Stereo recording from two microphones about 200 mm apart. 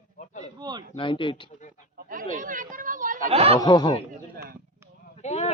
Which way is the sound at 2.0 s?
40° right (ahead or behind).